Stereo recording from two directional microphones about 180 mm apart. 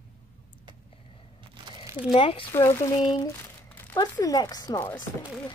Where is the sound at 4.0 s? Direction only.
20° left (ahead or behind).